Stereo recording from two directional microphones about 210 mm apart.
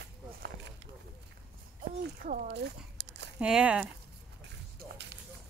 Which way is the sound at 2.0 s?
45° right (ahead or behind).